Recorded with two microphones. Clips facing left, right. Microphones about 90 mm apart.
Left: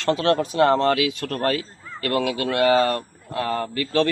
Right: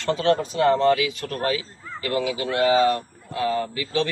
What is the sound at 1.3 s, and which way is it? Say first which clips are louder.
Speech: left 2 dB; 55° left (ahead or behind).